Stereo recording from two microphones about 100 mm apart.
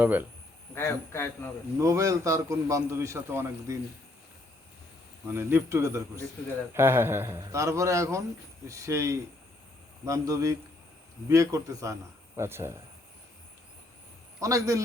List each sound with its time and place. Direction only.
0.0 s a man's voice: 20° right (ahead or behind)
0.7 s a man's voice: 25° left (ahead or behind)
1.8 s a man's voice: 30° right (ahead or behind)
5.3 s a man's voice: 25° right (ahead or behind)
14.4 s a man's voice: 35° right (ahead or behind)